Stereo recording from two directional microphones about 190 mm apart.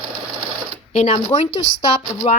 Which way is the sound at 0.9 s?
40° left (ahead or behind).